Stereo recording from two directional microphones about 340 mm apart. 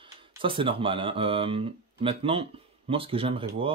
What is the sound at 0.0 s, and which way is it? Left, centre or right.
Speech, centre.